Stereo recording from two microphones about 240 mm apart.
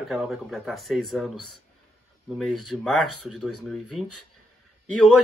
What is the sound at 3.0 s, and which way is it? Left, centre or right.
Speech, left.